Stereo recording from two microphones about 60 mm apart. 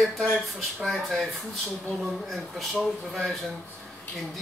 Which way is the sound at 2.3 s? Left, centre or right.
Centre.